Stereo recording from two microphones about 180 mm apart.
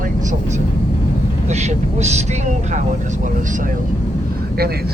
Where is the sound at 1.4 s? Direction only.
40° right (ahead or behind).